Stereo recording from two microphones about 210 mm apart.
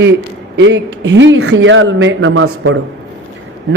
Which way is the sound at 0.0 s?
55° right (ahead or behind).